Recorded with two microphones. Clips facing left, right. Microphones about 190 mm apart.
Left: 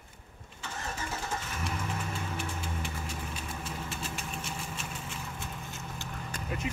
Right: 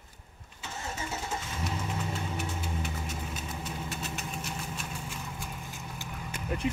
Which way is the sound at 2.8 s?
30° left (ahead or behind).